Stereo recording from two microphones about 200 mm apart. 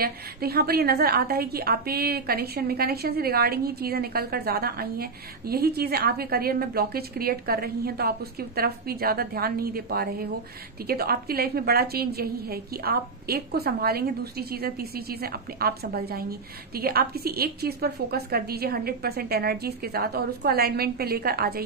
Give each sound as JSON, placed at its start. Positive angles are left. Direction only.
{"t": 0.0, "sound": "a woman's voice", "side_deg": -50}